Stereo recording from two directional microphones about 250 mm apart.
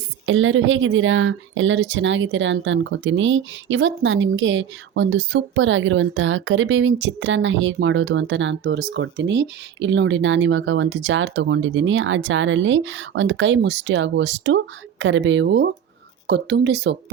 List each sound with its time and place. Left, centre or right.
0.3 s speech: right